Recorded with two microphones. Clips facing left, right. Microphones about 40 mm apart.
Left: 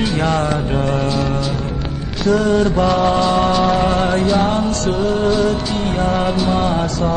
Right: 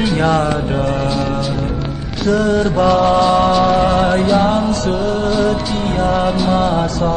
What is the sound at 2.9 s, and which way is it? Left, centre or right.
Mantra, right.